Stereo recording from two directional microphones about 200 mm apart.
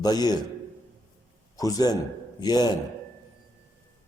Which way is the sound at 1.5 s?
20° left (ahead or behind).